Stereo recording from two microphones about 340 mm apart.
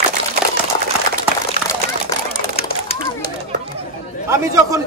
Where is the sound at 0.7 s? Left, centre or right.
Centre.